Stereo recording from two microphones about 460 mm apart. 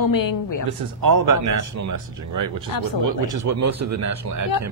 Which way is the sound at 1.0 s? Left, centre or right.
Right.